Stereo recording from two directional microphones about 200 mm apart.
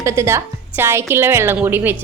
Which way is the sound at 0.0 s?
15° right (ahead or behind).